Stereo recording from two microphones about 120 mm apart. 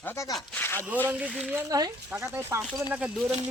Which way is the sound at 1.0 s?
10° right (ahead or behind).